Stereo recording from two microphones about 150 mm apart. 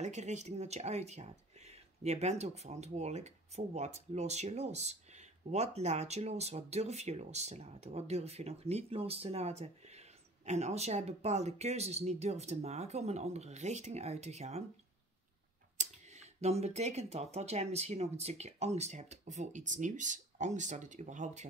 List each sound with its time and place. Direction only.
0.0 s speech: 50° right (ahead or behind)
15.8 s speech: 50° right (ahead or behind)